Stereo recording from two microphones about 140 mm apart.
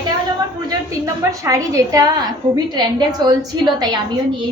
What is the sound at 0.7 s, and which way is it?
A woman's voice, 25° right (ahead or behind).